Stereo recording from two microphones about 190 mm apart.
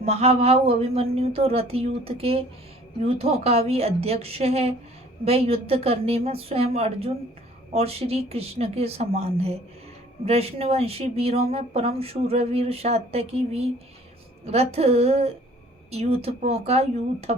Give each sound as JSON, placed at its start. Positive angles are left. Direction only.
{"t": 0.0, "sound": "speech", "side_deg": -30}